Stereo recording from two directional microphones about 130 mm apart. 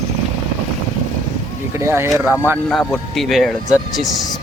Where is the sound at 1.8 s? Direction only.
20° right (ahead or behind).